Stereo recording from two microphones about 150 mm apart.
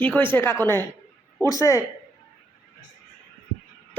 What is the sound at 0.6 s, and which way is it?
A woman's voice, 15° left (ahead or behind).